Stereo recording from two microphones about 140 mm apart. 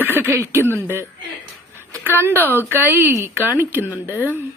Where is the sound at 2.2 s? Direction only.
15° right (ahead or behind).